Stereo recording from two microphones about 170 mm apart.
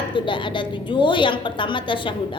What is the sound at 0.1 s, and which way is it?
A woman's voice, 30° left (ahead or behind).